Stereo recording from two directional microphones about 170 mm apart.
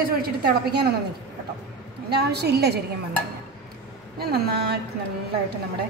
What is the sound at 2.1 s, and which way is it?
Speech, 75° right (ahead or behind).